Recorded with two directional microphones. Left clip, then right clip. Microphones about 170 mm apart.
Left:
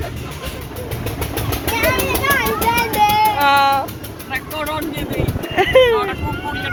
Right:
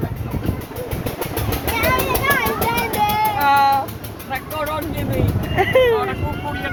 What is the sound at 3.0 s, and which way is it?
Music, 70° left (ahead or behind).